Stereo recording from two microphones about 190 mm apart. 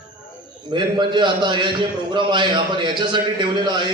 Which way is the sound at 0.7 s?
25° right (ahead or behind).